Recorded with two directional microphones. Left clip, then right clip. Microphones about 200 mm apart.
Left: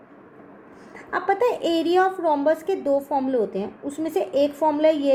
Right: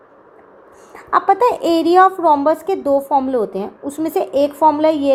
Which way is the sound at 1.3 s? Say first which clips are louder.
Right 6 dB; 25° right (ahead or behind).